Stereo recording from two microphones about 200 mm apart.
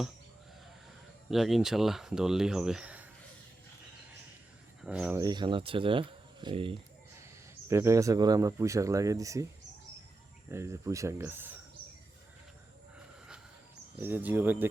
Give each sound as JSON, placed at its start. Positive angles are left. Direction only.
{"t": 1.3, "sound": "speech", "side_deg": 0}
{"t": 4.8, "sound": "speech", "side_deg": -5}
{"t": 5.2, "sound": "speech", "side_deg": -20}
{"t": 7.7, "sound": "speech", "side_deg": -15}
{"t": 10.5, "sound": "speech", "side_deg": -15}
{"t": 14.0, "sound": "speech", "side_deg": -10}